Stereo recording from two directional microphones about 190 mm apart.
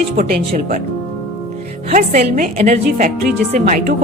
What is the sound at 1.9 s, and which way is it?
A woman's voice, 40° right (ahead or behind).